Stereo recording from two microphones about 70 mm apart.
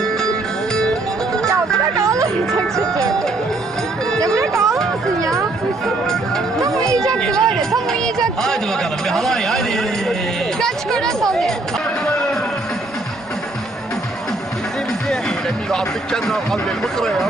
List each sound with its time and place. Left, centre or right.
0.7 s music: centre
4.2 s music: right
7.2 s chatter: centre
9.1 s a man's voice: centre
15.7 s a man's voice: centre